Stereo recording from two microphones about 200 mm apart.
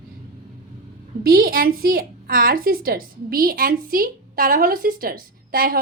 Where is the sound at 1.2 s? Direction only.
45° right (ahead or behind).